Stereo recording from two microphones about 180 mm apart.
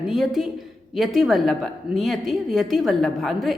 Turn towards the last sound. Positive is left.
turn(degrees=0)  # may be behind; listen again after turning